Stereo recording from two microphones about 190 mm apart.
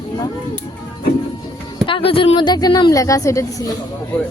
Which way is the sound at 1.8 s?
30° left (ahead or behind).